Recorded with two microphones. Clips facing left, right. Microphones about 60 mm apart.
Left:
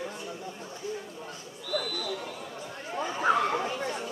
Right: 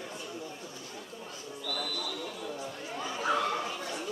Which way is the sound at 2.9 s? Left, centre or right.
Left.